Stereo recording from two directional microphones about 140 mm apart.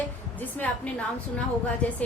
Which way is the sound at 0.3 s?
10° left (ahead or behind).